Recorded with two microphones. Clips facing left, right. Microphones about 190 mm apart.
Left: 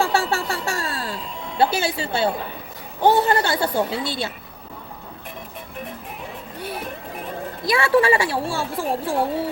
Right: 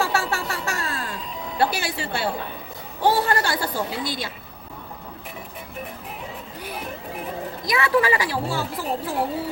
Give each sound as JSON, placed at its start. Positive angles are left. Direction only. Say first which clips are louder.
{"t": 0.0, "sound": "a sound", "louder": "left 3 dB", "side_deg": 30}
{"t": 1.5, "sound": "a woman's voice", "louder": "left 3 dB", "side_deg": 25}
{"t": 7.6, "sound": "a woman's voice", "louder": "left 3 dB", "side_deg": 30}